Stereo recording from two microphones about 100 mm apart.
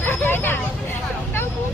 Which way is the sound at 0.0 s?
20° left (ahead or behind).